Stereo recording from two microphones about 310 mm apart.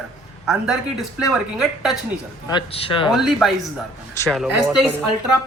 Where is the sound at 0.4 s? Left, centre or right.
Centre.